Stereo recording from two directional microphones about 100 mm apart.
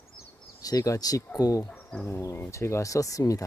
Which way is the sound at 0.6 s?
35° left (ahead or behind).